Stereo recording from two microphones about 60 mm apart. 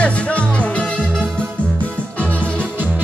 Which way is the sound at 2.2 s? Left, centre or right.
Left.